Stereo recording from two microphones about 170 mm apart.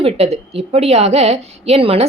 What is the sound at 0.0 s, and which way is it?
Speech, 35° right (ahead or behind).